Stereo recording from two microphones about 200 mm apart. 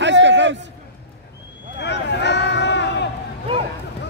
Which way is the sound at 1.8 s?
60° left (ahead or behind).